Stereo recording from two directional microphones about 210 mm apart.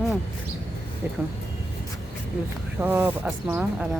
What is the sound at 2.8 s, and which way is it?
Speech, 10° right (ahead or behind).